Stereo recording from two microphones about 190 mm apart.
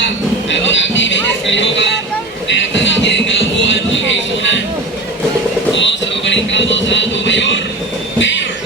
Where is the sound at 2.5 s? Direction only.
75° left (ahead or behind).